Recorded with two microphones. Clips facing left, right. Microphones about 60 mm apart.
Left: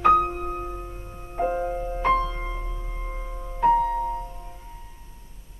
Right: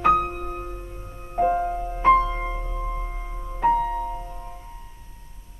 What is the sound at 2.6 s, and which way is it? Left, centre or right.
Music, centre.